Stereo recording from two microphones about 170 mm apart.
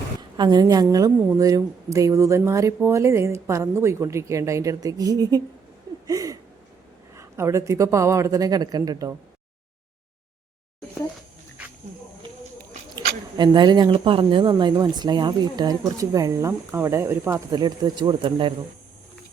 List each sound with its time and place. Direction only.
0.2 s a woman's voice: 25° right (ahead or behind)
13.3 s speech: 25° right (ahead or behind)